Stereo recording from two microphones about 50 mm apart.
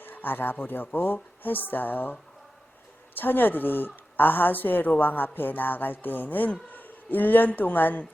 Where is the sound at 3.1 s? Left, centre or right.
Left.